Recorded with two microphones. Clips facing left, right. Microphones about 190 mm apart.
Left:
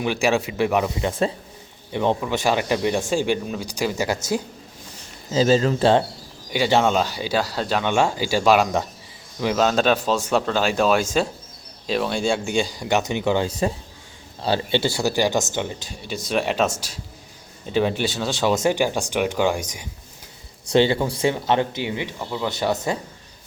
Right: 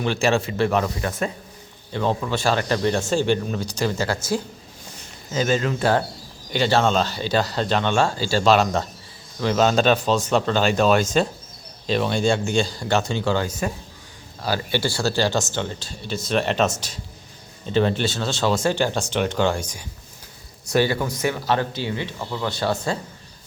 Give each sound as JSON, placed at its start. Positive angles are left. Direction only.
{"t": 0.0, "sound": "speech", "side_deg": 10}
{"t": 5.3, "sound": "speech", "side_deg": 30}
{"t": 6.5, "sound": "speech", "side_deg": 15}
{"t": 13.5, "sound": "speech", "side_deg": 30}